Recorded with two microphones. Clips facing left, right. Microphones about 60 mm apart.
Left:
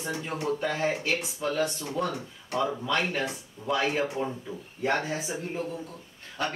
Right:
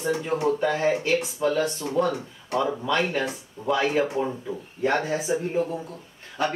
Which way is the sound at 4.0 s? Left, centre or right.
Centre.